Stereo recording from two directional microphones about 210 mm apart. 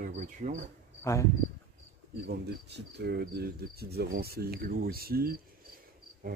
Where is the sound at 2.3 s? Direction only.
55° right (ahead or behind).